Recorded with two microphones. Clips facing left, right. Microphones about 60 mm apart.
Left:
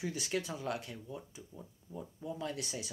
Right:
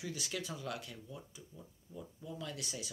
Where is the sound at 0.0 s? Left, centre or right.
Left.